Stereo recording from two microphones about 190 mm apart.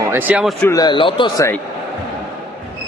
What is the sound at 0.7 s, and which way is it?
Speech, 20° left (ahead or behind).